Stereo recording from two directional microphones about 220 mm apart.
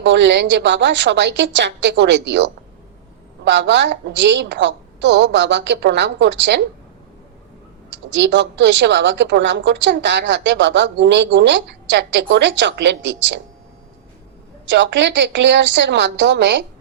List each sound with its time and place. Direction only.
0.0 s a woman's voice: 50° right (ahead or behind)
7.9 s a woman's voice: 55° right (ahead or behind)
14.7 s a woman's voice: 55° right (ahead or behind)